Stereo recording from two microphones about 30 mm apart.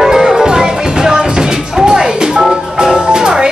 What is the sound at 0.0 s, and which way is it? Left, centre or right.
Music, centre.